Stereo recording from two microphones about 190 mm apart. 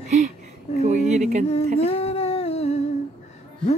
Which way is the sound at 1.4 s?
30° left (ahead or behind).